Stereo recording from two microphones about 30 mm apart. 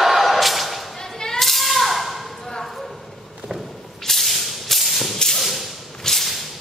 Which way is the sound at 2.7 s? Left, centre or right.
Centre.